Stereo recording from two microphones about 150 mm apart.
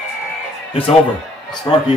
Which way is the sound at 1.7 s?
30° left (ahead or behind).